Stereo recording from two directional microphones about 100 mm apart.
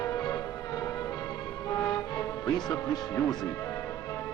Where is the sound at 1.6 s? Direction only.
30° left (ahead or behind).